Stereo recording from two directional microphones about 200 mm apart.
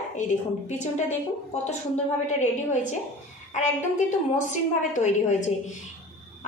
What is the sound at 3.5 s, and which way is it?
A woman's voice, 40° left (ahead or behind).